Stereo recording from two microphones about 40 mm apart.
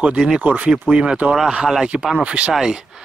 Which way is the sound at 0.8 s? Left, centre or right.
Right.